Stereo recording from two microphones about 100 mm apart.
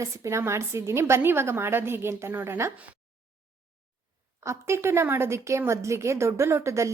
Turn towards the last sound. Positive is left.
turn(degrees=-30)  # may be behind; listen again after turning